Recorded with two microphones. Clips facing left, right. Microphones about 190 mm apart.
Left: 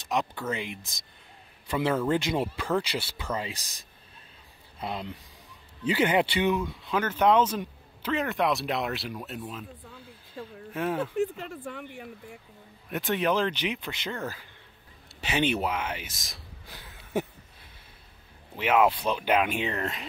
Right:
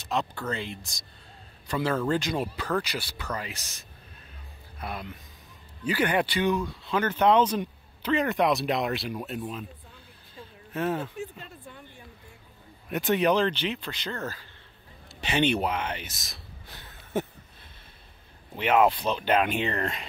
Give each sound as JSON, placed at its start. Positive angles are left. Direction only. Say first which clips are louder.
{"t": 0.0, "sound": "speech", "louder": "even", "side_deg": 15}
{"t": 2.0, "sound": "speech", "louder": "left 1 dB", "side_deg": 25}
{"t": 6.9, "sound": "speech", "louder": "right 1 dB", "side_deg": 5}
{"t": 10.7, "sound": "speech", "louder": "even", "side_deg": 10}
{"t": 11.1, "sound": "speech", "louder": "left 9 dB", "side_deg": 85}
{"t": 12.9, "sound": "speech", "louder": "right 3 dB", "side_deg": 0}
{"t": 16.6, "sound": "a sound", "louder": "even", "side_deg": 10}
{"t": 18.6, "sound": "speech", "louder": "right 1 dB", "side_deg": 5}